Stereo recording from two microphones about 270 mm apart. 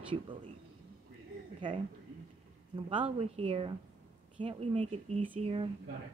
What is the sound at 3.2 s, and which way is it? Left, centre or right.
A woman's voice, right.